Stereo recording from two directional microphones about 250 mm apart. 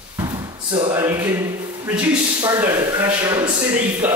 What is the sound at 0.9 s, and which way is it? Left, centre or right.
Speech, centre.